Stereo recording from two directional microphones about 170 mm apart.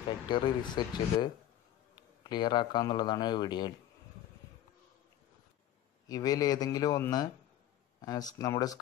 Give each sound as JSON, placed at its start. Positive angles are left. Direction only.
{"t": 0.3, "sound": "speech", "side_deg": 25}
{"t": 6.0, "sound": "speech", "side_deg": 20}